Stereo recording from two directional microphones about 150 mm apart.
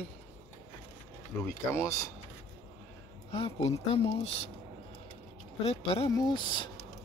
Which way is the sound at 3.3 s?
35° left (ahead or behind).